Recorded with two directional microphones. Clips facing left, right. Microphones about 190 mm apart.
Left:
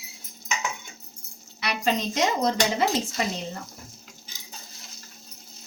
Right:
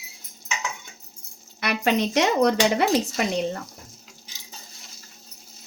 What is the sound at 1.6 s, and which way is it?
Speech, 60° right (ahead or behind).